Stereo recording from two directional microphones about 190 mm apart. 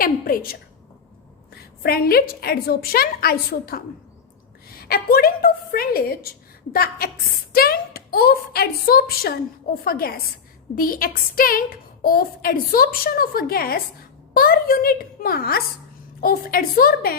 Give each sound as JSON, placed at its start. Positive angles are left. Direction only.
{"t": 0.0, "sound": "a woman's voice", "side_deg": 50}
{"t": 1.8, "sound": "a woman's voice", "side_deg": 55}